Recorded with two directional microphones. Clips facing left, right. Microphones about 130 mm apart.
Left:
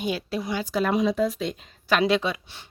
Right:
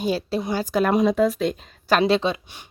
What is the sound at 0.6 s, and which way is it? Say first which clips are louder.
Speech: right 4 dB; 50° right (ahead or behind).